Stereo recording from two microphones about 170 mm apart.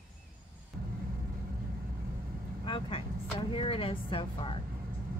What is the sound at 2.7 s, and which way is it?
Speech, 30° left (ahead or behind).